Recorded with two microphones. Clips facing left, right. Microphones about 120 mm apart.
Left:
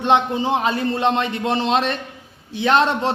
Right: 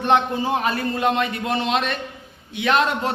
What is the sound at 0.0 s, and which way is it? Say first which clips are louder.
A man's voice: left 1 dB; 20° left (ahead or behind).